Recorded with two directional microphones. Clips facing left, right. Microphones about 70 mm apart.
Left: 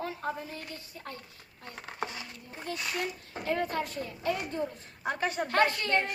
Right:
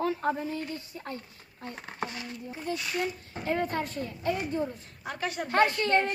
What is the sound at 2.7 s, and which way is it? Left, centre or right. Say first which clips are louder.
Speech: right 4 dB; centre.